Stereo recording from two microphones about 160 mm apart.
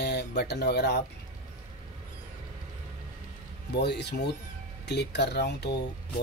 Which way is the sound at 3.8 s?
90° left.